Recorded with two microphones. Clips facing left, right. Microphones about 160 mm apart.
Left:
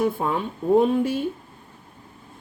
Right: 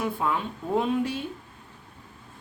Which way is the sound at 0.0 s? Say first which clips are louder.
Left 4 dB; 45° left (ahead or behind).